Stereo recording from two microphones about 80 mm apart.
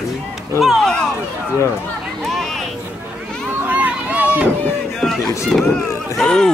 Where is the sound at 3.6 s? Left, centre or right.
Centre.